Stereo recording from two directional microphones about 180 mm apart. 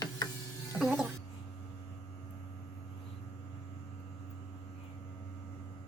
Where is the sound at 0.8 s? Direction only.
5° right (ahead or behind).